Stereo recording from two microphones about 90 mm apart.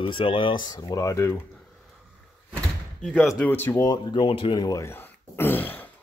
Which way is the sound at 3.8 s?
60° left (ahead or behind).